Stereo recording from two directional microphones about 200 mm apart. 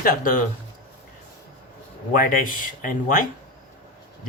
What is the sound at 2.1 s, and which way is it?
Speech, 45° left (ahead or behind).